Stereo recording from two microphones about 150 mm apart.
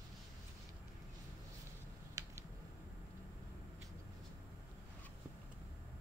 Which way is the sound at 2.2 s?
20° right (ahead or behind).